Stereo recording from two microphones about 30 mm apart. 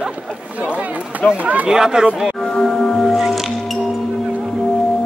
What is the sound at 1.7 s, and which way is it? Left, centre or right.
Speech, right.